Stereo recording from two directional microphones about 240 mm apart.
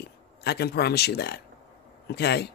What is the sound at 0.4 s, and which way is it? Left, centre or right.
Speech, left.